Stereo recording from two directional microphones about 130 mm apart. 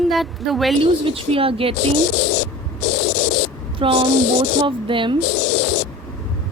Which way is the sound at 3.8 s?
40° right (ahead or behind).